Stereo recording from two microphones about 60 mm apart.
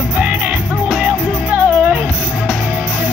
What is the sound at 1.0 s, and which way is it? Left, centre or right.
Music, right.